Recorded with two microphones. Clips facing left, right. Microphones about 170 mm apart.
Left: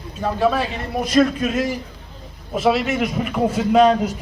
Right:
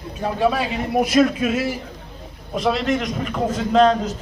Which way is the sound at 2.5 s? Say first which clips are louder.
Left 2 dB; 5° left (ahead or behind).